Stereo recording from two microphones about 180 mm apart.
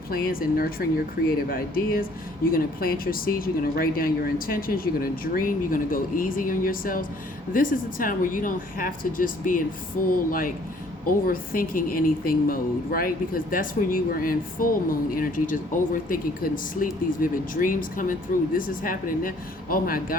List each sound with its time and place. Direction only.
0.1 s speech: 55° left (ahead or behind)
11.0 s speech: 50° left (ahead or behind)